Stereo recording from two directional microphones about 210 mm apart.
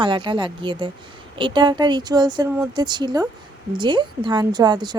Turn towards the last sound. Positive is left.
turn(degrees=-20)  # may be behind; listen again after turning